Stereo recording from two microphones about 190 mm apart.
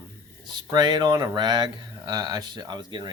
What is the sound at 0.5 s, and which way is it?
Speech, 20° right (ahead or behind).